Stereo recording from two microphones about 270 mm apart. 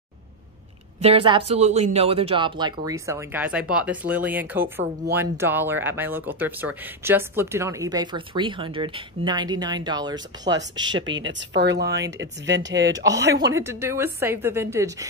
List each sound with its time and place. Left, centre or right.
1.0 s speech: centre
11.1 s speech: right
12.9 s speech: centre